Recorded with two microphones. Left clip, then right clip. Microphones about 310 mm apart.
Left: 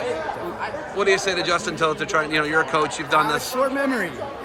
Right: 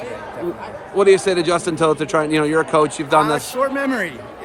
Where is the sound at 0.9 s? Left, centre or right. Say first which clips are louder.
Right 6 dB; centre.